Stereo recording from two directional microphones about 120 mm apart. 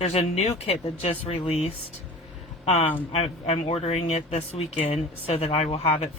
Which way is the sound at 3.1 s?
60° left (ahead or behind).